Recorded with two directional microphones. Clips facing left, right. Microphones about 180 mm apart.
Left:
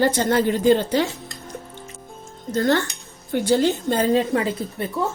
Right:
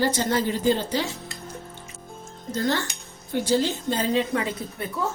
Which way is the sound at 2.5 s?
55° left (ahead or behind).